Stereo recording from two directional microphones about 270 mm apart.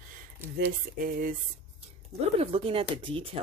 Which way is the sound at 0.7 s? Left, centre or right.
Right.